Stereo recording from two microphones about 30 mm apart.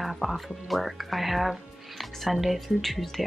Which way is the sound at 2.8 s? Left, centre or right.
Centre.